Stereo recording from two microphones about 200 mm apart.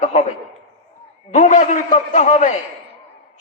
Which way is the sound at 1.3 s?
35° left (ahead or behind).